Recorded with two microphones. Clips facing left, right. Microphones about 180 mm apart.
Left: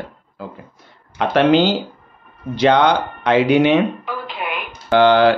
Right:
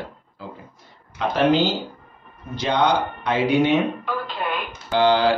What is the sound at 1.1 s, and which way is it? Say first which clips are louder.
Speech: left 5 dB; 75° left (ahead or behind).